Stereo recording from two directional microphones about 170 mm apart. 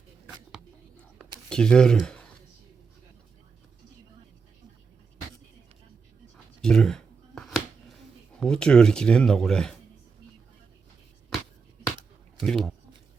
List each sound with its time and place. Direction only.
1.5 s speech: 5° left (ahead or behind)
6.3 s a sound: 5° left (ahead or behind)
8.4 s speech: 5° left (ahead or behind)
12.4 s speech: centre (ahead or behind)